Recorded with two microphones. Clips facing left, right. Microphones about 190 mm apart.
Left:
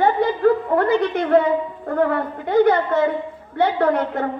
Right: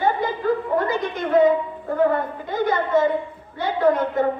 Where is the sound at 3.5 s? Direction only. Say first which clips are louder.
Left 1 dB; 60° left (ahead or behind).